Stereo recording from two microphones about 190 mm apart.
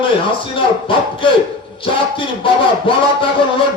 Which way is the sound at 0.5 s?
25° left (ahead or behind).